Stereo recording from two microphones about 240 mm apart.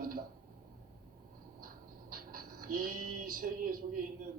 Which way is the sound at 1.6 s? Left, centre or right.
Right.